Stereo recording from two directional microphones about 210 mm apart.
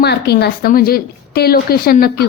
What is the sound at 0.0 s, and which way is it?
A woman's voice, 50° left (ahead or behind).